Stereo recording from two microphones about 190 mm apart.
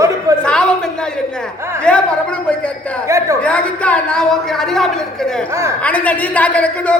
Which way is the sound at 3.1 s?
15° right (ahead or behind).